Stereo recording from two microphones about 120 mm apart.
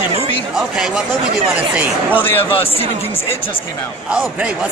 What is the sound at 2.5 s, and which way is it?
Speech, 50° left (ahead or behind).